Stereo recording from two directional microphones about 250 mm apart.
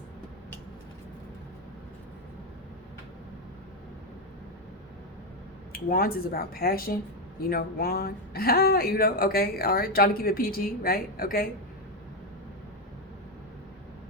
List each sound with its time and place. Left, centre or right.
5.7 s speech: left